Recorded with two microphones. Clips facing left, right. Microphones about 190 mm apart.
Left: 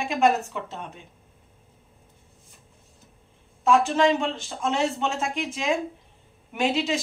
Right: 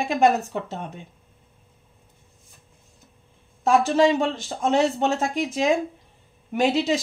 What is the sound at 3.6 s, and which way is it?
Speech, 40° right (ahead or behind).